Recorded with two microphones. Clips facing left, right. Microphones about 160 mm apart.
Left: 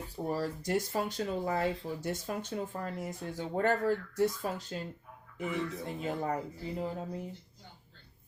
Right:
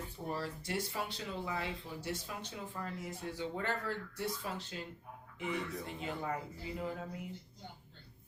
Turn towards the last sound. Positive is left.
turn(degrees=30)  # may be behind; listen again after turning